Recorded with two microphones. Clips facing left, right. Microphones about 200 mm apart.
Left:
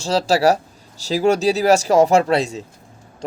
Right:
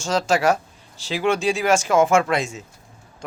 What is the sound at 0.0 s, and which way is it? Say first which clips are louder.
Speech: left 3 dB; 35° left (ahead or behind).